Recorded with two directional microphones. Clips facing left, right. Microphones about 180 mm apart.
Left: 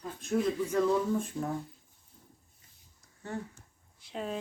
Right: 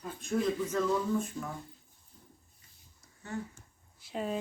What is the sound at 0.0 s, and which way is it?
Speech, centre (ahead or behind).